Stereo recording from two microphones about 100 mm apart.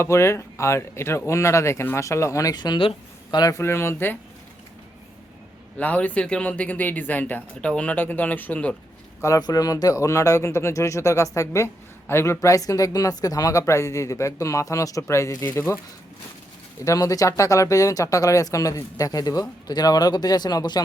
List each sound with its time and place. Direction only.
0.0 s speech: 25° left (ahead or behind)
3.6 s speech: 25° left (ahead or behind)
5.7 s speech: 15° left (ahead or behind)
9.2 s speech: 35° left (ahead or behind)
16.8 s speech: 35° left (ahead or behind)